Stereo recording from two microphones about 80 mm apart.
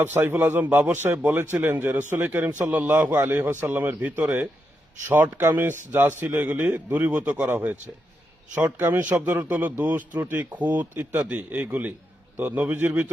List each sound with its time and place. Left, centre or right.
0.0 s a man's voice: right